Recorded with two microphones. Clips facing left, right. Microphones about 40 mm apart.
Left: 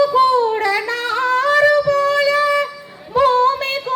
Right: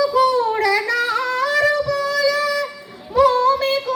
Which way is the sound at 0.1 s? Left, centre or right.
Left.